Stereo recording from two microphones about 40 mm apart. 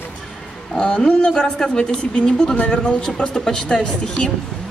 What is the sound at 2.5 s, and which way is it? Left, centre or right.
Speech, left.